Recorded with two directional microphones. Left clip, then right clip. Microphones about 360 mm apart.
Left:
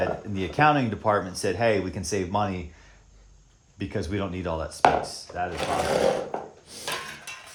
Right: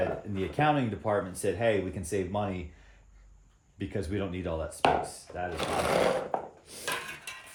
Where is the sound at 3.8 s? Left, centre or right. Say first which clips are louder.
Left 4 dB; centre.